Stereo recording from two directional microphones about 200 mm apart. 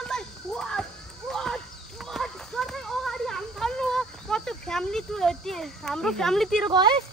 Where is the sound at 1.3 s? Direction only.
Centre (ahead or behind).